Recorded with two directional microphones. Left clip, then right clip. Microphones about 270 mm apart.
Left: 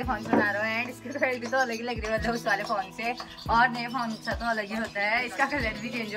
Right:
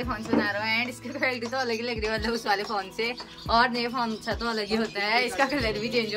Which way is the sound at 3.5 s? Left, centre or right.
Centre.